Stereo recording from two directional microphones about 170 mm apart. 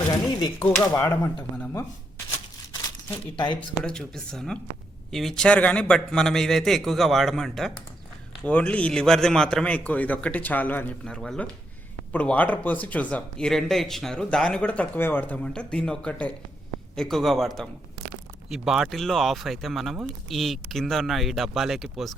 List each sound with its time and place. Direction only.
0.1 s speech: 25° left (ahead or behind)
0.8 s speech: 15° left (ahead or behind)
3.3 s speech: 30° left (ahead or behind)
3.8 s speech: 5° left (ahead or behind)